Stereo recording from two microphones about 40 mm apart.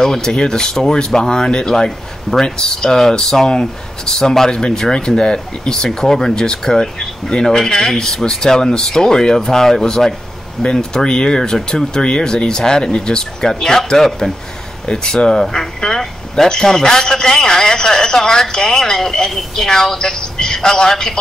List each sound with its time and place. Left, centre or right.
0.0 s speech: centre